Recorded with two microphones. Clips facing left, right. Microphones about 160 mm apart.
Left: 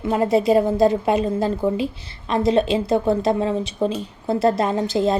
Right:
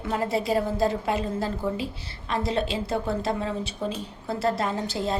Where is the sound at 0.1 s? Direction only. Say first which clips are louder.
Left 8 dB; 20° left (ahead or behind).